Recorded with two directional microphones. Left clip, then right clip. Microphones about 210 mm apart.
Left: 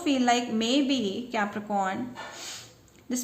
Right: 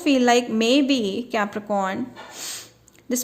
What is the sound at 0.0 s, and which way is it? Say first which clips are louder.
A woman's voice: right 7 dB; 45° right (ahead or behind).